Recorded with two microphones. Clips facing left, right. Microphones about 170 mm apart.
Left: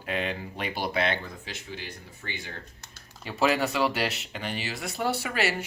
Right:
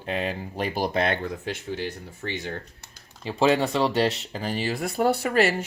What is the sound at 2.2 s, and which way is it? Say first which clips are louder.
Speech: right 8 dB; 40° right (ahead or behind).